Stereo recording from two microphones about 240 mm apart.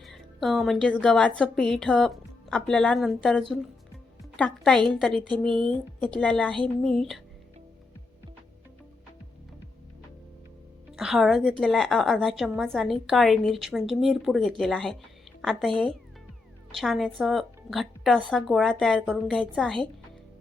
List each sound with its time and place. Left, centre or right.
0.0 s a woman's voice: centre
10.9 s a woman's voice: centre